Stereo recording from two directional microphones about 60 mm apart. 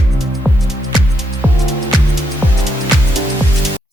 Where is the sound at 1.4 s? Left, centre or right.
Right.